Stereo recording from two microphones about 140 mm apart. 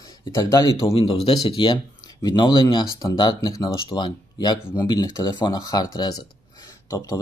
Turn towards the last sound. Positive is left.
turn(degrees=25)  # may be behind; listen again after turning